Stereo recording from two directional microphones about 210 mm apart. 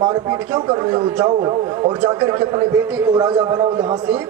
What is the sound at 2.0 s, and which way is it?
A man's voice, 5° right (ahead or behind).